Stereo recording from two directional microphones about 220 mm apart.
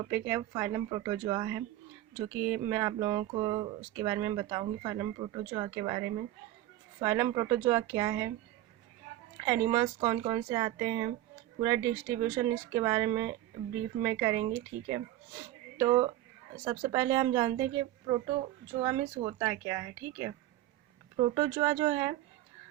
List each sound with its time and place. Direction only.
0.1 s speech: 10° right (ahead or behind)
9.4 s speech: 15° right (ahead or behind)
21.2 s speech: 25° right (ahead or behind)
21.5 s speech: 15° right (ahead or behind)